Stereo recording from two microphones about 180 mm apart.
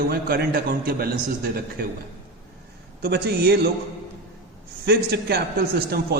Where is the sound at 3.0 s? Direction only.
65° right (ahead or behind).